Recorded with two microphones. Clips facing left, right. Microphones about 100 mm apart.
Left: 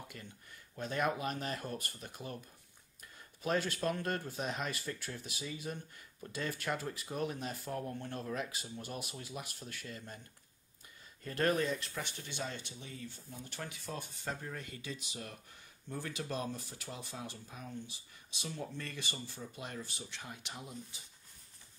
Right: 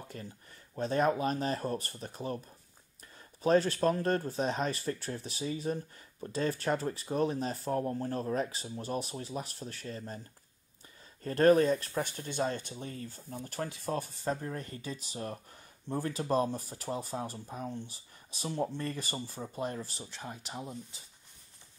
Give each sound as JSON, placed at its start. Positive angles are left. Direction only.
{"t": 0.1, "sound": "speech", "side_deg": -35}
{"t": 3.4, "sound": "speech", "side_deg": -35}
{"t": 11.2, "sound": "speech", "side_deg": -40}